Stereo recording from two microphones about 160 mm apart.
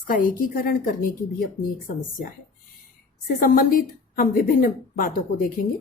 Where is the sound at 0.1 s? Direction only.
60° left (ahead or behind).